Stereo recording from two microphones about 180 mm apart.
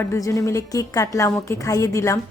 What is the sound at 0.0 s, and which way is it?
A woman's voice, 15° left (ahead or behind).